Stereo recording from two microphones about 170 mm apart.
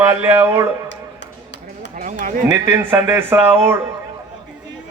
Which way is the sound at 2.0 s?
50° right (ahead or behind).